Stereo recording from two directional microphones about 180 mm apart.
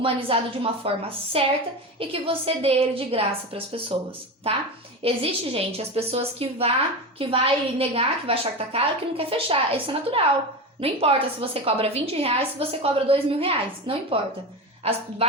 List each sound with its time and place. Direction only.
0.0 s a woman's voice: 30° right (ahead or behind)
5.0 s a woman's voice: 35° right (ahead or behind)